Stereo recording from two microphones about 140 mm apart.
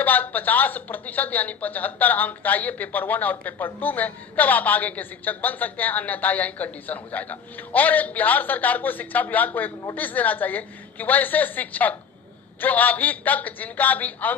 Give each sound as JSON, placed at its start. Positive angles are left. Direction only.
{"t": 0.0, "sound": "speech", "side_deg": 10}